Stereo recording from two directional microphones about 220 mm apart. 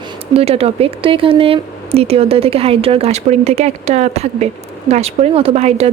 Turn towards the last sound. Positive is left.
turn(degrees=-30)  # may be behind; listen again after turning